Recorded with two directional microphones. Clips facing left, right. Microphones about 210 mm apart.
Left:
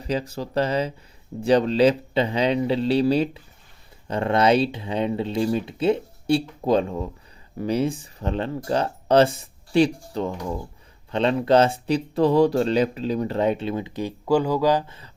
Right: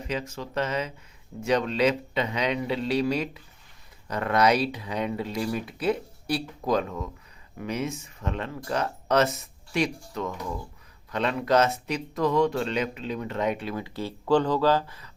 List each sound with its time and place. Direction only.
0.0 s speech: 35° left (ahead or behind)